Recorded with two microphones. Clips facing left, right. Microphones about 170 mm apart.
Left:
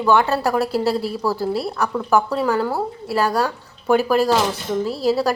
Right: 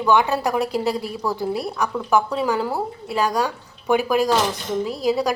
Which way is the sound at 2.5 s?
Centre (ahead or behind).